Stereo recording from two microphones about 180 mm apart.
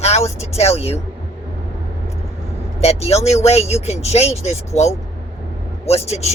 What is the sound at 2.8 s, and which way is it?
Speech, 35° left (ahead or behind).